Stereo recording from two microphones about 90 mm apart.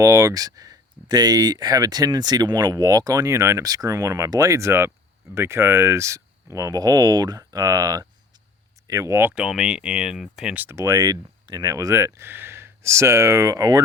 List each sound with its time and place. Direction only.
0.0 s speech: 35° right (ahead or behind)
9.3 s speech: 10° right (ahead or behind)
10.7 s speech: 35° right (ahead or behind)